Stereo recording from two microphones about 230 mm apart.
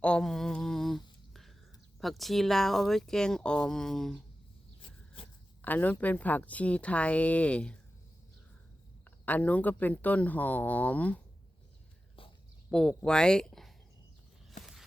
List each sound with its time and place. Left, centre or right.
0.0 s a sound: centre
2.0 s speech: centre
5.6 s speech: centre
9.0 s speech: centre
12.7 s speech: centre
14.6 s a sound: centre